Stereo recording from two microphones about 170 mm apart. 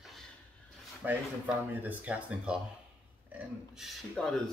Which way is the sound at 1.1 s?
10° right (ahead or behind).